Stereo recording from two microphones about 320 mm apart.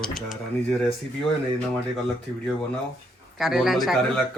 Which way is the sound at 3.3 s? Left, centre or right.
Centre.